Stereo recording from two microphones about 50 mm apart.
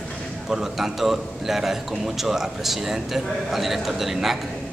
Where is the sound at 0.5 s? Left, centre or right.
Centre.